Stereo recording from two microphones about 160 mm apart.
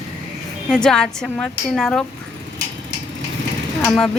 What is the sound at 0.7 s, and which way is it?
Speech, 5° left (ahead or behind).